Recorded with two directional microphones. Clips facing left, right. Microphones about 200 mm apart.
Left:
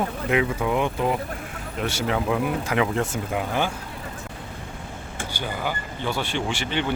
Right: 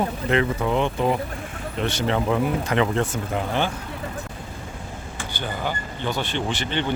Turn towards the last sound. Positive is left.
turn(degrees=10)  # may be behind; listen again after turning